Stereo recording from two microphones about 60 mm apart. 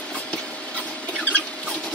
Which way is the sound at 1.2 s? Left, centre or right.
Left.